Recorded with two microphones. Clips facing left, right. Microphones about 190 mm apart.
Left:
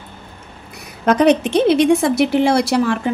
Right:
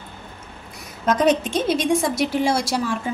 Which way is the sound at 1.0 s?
65° left (ahead or behind).